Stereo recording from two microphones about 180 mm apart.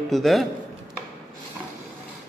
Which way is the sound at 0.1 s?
Centre (ahead or behind).